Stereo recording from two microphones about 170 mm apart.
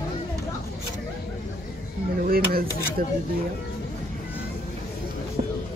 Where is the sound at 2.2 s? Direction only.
60° right (ahead or behind).